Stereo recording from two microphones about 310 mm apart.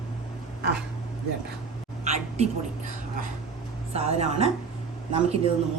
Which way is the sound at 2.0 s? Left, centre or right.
Right.